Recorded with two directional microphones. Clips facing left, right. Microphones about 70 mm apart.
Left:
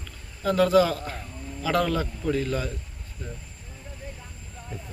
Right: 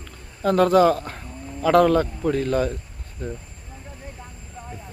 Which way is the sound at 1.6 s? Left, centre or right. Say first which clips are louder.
Right 8 dB; right.